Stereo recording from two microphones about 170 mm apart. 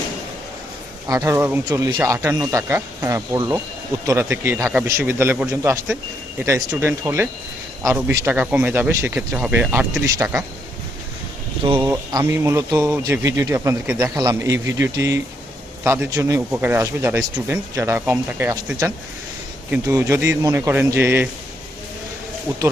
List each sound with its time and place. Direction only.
1.0 s speech: 20° right (ahead or behind)
11.6 s speech: 25° right (ahead or behind)